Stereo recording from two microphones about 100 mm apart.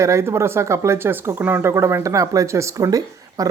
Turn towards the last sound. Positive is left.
turn(degrees=-35)  # may be behind; listen again after turning